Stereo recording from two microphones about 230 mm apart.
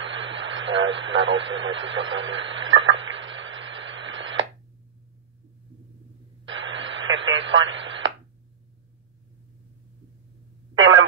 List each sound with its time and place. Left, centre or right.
0.0 s speech: right
2.9 s radio: right
6.4 s radio: right
10.7 s a sound: right